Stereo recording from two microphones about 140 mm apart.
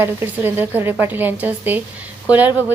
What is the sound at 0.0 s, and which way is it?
A woman's voice, 15° right (ahead or behind).